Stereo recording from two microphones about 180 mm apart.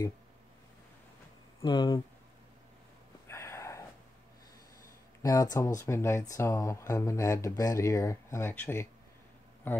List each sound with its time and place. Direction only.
1.6 s speech: 25° left (ahead or behind)
3.3 s a sound: 15° left (ahead or behind)
5.2 s speech: 20° left (ahead or behind)